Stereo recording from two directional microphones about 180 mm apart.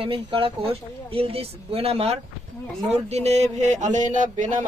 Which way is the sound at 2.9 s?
35° right (ahead or behind).